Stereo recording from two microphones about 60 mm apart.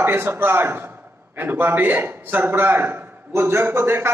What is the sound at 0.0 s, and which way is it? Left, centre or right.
A man's voice, right.